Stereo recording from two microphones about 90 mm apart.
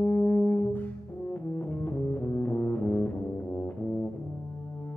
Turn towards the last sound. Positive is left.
turn(degrees=25)  # may be behind; listen again after turning